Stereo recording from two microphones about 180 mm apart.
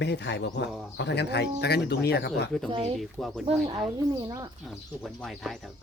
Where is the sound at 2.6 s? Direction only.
30° right (ahead or behind).